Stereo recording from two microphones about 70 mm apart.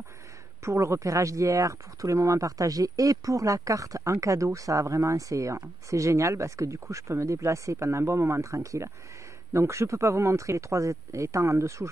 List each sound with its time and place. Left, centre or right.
0.7 s speech: right